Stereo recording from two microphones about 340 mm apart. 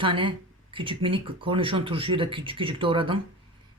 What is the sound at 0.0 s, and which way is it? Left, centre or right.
Speech, centre.